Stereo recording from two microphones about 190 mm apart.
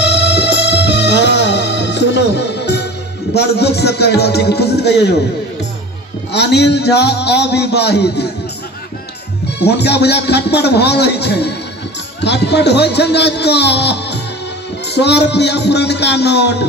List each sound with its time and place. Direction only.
0.0 s music: 65° left (ahead or behind)
3.3 s a man's voice: 60° left (ahead or behind)
6.3 s a man's voice: 60° left (ahead or behind)
9.6 s a man's voice: 60° left (ahead or behind)